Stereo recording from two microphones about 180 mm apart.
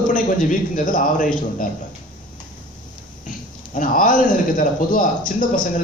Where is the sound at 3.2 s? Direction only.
45° left (ahead or behind).